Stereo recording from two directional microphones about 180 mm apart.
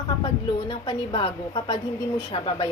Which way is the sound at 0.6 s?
25° left (ahead or behind).